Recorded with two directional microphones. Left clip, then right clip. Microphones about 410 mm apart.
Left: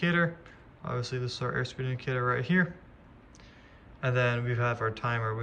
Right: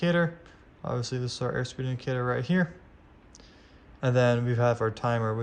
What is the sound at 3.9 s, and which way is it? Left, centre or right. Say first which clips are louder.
Speech: right 4 dB; centre.